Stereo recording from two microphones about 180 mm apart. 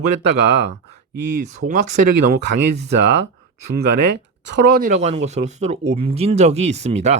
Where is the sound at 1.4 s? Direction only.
45° right (ahead or behind).